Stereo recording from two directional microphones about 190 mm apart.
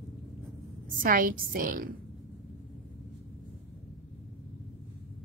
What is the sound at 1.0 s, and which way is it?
Speech, 45° right (ahead or behind).